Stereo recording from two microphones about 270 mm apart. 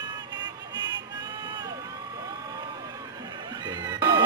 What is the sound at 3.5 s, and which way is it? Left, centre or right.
Music, centre.